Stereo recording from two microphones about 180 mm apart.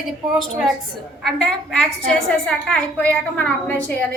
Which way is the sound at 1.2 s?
5° left (ahead or behind).